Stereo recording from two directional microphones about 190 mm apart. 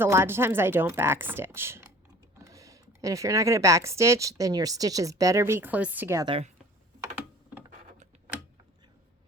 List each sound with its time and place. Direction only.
0.0 s speech: 15° right (ahead or behind)
6.2 s speech: 30° right (ahead or behind)